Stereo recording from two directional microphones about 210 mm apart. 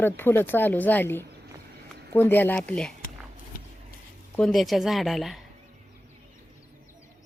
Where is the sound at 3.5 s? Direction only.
45° left (ahead or behind).